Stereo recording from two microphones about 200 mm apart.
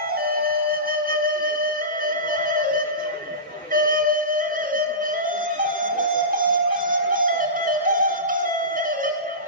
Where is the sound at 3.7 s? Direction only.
45° right (ahead or behind).